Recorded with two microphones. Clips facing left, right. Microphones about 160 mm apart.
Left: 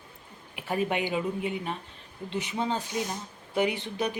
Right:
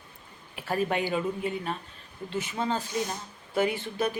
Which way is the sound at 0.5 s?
15° left (ahead or behind).